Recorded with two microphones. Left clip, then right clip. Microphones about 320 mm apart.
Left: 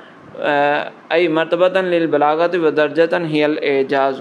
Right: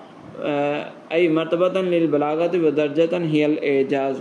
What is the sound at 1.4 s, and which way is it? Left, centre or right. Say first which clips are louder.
Speech: left 5 dB; centre.